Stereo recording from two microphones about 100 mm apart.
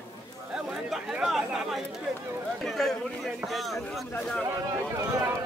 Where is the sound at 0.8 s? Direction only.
5° right (ahead or behind).